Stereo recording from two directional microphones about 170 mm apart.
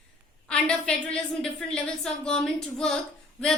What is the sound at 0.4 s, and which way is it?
A woman's voice, 5° left (ahead or behind).